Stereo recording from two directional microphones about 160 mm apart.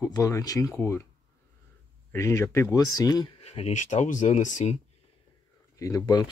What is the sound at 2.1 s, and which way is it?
Speech, 15° left (ahead or behind).